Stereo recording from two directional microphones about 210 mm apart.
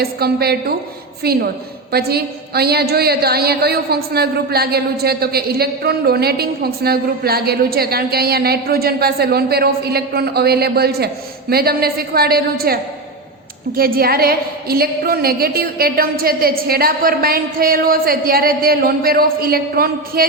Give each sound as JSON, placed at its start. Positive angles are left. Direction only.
{"t": 0.0, "sound": "a woman's voice", "side_deg": -50}